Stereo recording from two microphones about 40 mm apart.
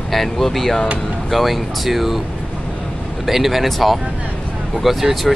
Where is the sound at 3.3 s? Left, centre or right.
Centre.